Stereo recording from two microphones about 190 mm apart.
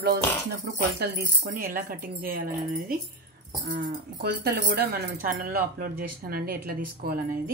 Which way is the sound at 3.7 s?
55° right (ahead or behind).